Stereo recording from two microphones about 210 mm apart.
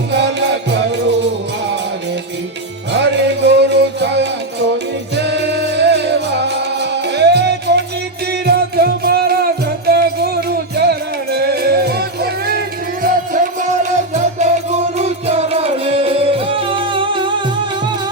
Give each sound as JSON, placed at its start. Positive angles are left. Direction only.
{"t": 0.1, "sound": "music", "side_deg": -55}
{"t": 2.9, "sound": "music", "side_deg": -55}